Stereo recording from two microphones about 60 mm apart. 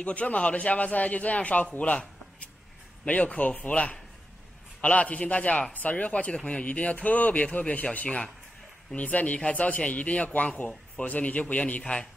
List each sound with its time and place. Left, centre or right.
0.0 s a man's voice: left